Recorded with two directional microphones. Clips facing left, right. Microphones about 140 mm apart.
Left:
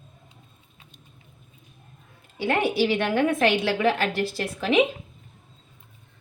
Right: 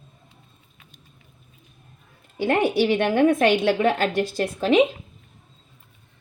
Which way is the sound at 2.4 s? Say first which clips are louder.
Right 3 dB; 20° right (ahead or behind).